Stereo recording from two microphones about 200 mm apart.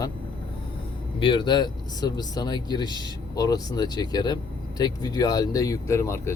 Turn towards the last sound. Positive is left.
turn(degrees=15)  # may be behind; listen again after turning